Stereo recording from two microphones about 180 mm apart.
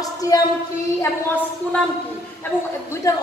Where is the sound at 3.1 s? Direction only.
15° left (ahead or behind).